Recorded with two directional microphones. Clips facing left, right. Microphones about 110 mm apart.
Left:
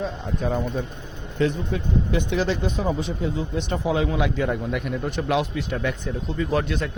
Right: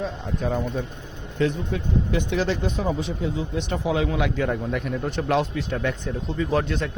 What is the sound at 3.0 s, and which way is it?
A man's voice, 40° left (ahead or behind).